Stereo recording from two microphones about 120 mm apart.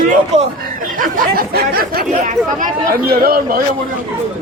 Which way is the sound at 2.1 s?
90° right.